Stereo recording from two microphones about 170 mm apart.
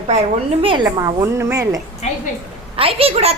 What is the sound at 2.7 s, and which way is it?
Speech, 35° right (ahead or behind).